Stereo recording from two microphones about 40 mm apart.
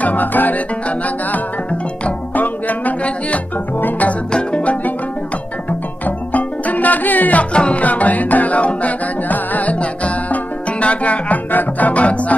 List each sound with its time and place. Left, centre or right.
0.0 s music: left
0.8 s music: left
2.3 s music: left
4.3 s music: left
5.7 s music: left
7.5 s music: left
7.8 s music: left